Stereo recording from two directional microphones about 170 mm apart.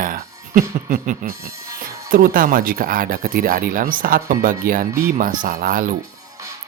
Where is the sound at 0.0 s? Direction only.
55° right (ahead or behind).